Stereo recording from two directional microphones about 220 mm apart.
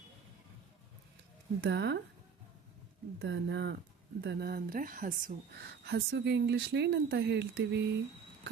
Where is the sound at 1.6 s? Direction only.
50° right (ahead or behind).